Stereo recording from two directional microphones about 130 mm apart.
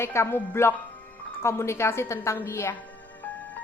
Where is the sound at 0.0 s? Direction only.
20° left (ahead or behind).